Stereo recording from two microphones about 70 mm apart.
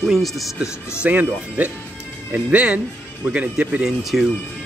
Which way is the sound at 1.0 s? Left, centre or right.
Right.